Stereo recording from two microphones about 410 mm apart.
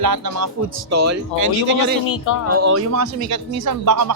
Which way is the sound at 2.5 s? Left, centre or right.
Right.